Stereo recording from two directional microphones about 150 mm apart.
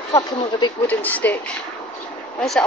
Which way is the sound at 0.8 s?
10° left (ahead or behind).